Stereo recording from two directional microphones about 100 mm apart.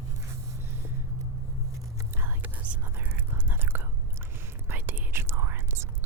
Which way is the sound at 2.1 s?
20° right (ahead or behind).